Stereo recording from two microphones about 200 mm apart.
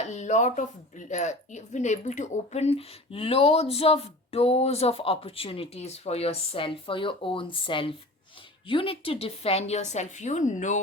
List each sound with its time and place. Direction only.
0.0 s speech: 35° left (ahead or behind)